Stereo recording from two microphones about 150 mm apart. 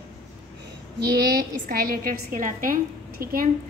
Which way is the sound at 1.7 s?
80° right.